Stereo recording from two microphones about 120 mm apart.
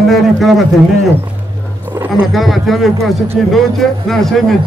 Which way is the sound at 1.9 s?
15° right (ahead or behind).